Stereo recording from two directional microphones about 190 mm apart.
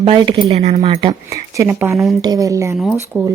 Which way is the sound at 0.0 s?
25° right (ahead or behind).